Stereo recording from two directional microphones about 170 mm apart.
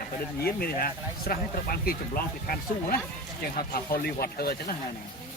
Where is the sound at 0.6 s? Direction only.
60° left (ahead or behind).